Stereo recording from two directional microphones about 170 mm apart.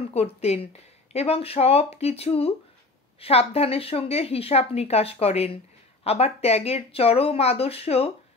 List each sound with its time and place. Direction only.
0.1 s speech: 35° left (ahead or behind)